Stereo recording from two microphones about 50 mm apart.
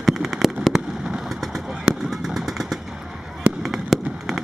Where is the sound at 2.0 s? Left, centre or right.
Centre.